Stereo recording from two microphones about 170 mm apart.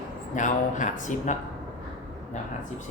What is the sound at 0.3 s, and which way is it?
Speech, 45° left (ahead or behind).